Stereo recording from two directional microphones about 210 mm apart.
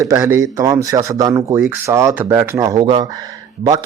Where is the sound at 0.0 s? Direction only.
15° right (ahead or behind).